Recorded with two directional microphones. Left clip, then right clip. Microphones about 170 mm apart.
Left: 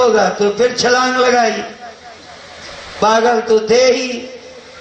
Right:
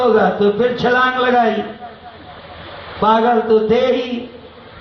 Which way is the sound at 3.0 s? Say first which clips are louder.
Left 1 dB; 40° left (ahead or behind).